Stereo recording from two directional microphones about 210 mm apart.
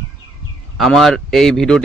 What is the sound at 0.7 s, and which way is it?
Speech, centre (ahead or behind).